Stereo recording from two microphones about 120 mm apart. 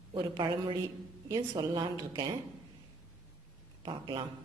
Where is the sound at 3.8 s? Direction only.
40° right (ahead or behind).